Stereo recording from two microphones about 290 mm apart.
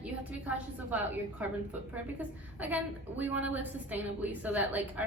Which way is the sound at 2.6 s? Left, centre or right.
Centre.